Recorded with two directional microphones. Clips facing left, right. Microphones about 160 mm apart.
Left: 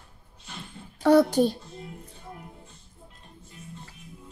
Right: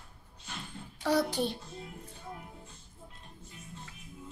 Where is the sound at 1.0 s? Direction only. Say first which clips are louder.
Left 10 dB; 55° left (ahead or behind).